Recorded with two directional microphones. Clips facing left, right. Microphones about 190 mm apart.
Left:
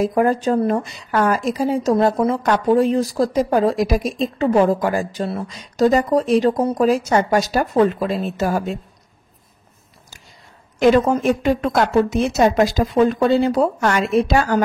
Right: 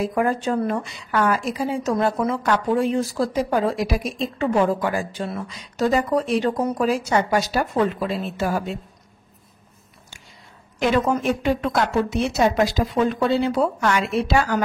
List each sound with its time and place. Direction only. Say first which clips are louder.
0.0 s a woman's voice: left 5 dB; 40° left (ahead or behind)
10.9 s a woman's voice: left 5 dB; 40° left (ahead or behind)